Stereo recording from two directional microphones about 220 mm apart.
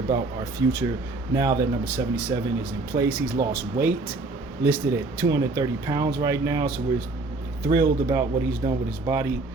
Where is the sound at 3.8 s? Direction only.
45° right (ahead or behind).